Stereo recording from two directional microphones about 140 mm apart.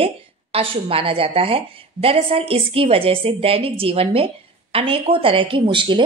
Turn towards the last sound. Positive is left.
turn(degrees=-35)  # may be behind; listen again after turning